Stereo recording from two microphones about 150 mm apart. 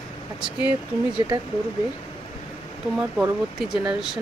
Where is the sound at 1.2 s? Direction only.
20° right (ahead or behind).